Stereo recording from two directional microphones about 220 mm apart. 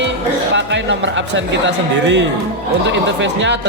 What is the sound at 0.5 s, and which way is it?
Speech, 55° right (ahead or behind).